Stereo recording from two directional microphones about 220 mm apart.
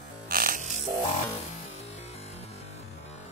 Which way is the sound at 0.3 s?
40° right (ahead or behind).